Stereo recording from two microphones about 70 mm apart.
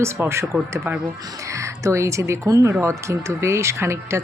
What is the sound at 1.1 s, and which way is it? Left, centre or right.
Speech, right.